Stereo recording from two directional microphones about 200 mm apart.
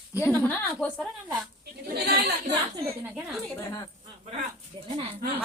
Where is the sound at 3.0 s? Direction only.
5° right (ahead or behind).